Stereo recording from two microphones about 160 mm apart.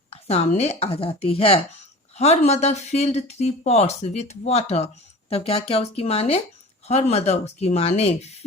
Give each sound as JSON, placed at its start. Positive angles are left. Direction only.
{"t": 0.1, "sound": "speech", "side_deg": 40}